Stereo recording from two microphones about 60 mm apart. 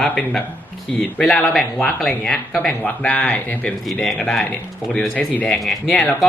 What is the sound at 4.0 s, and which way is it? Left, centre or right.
Speech, centre.